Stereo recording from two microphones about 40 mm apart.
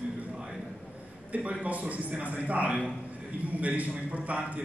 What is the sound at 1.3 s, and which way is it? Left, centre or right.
A man's voice, right.